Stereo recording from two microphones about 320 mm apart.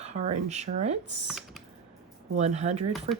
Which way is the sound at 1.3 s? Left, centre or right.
Centre.